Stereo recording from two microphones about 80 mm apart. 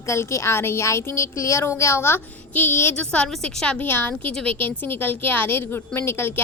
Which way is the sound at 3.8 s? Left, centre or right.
Left.